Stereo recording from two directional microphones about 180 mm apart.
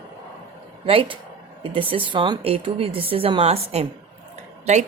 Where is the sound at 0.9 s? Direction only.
30° right (ahead or behind).